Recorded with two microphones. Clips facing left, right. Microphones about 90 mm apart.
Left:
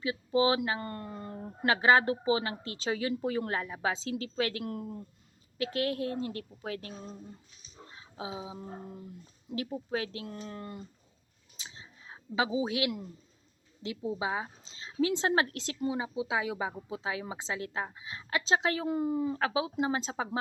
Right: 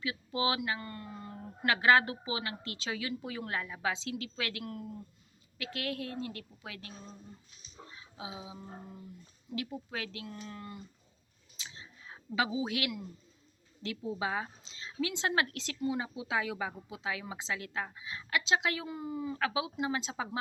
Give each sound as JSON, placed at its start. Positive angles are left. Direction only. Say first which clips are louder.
{"t": 0.0, "sound": "speech", "louder": "left 6 dB", "side_deg": 30}
{"t": 0.8, "sound": "speech", "louder": "left 4 dB", "side_deg": 45}
{"t": 1.6, "sound": "a woman's voice", "louder": "left 2 dB", "side_deg": 25}
{"t": 5.5, "sound": "a woman's voice", "louder": "left 6 dB", "side_deg": 30}
{"t": 7.9, "sound": "a sound", "louder": "left 5 dB", "side_deg": 35}
{"t": 9.6, "sound": "a woman's voice", "louder": "left 5 dB", "side_deg": 30}
{"t": 11.5, "sound": "a sound", "louder": "even", "side_deg": 25}
{"t": 13.8, "sound": "speech", "louder": "left 2 dB", "side_deg": 20}
{"t": 14.8, "sound": "a woman's voice", "louder": "left 6 dB", "side_deg": 30}
{"t": 19.4, "sound": "a woman's voice", "louder": "left 3 dB", "side_deg": 30}